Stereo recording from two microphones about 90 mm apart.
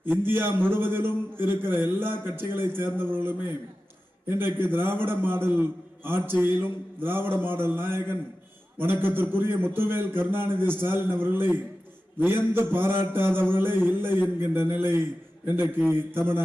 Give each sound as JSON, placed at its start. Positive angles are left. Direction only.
{"t": 0.0, "sound": "a man's voice", "side_deg": -25}